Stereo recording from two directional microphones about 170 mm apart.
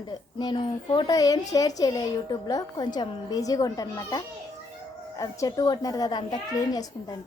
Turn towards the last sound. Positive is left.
turn(degrees=20)  # may be behind; listen again after turning